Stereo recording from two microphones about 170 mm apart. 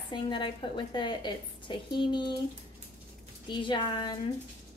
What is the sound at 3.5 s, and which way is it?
Speech, 30° left (ahead or behind).